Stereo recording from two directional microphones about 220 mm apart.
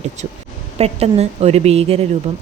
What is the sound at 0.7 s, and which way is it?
Speech, 30° right (ahead or behind).